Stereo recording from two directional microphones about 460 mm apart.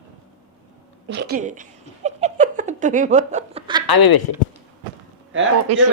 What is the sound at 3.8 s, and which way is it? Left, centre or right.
Speech, left.